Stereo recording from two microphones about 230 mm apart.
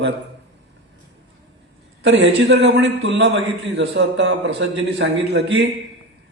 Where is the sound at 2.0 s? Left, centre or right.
Right.